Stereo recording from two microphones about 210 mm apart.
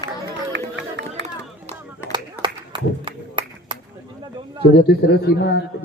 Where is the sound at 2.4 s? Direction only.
25° right (ahead or behind).